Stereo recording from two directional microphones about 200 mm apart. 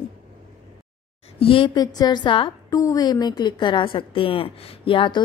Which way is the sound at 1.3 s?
25° left (ahead or behind).